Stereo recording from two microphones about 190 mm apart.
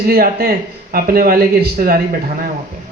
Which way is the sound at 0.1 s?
55° right (ahead or behind).